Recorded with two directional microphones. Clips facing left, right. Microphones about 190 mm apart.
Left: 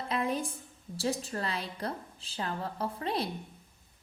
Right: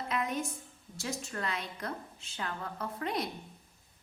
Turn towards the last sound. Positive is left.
turn(degrees=30)  # may be behind; listen again after turning